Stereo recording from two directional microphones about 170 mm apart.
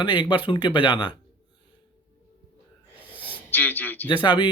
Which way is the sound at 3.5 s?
10° left (ahead or behind).